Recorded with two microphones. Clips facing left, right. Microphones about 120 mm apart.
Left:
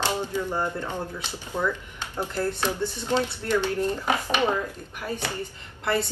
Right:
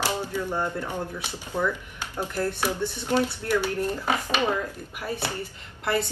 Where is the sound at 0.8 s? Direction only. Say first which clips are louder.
Even; 10° right (ahead or behind).